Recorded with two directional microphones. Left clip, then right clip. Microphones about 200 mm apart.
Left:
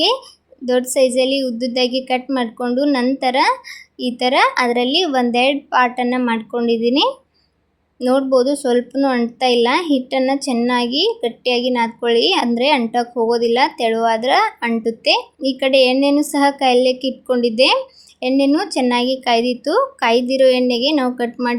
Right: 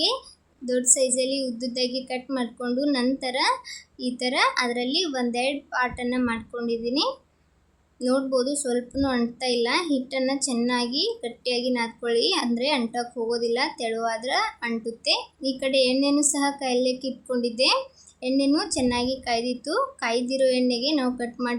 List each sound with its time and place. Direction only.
0.6 s a woman's voice: 25° left (ahead or behind)